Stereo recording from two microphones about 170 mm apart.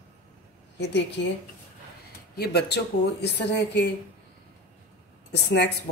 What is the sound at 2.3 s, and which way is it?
Speech, 70° left (ahead or behind).